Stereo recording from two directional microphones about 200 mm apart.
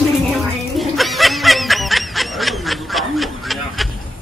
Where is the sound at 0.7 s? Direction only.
Centre (ahead or behind).